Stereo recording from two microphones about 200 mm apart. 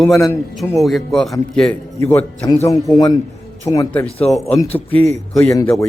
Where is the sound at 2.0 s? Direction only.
15° left (ahead or behind).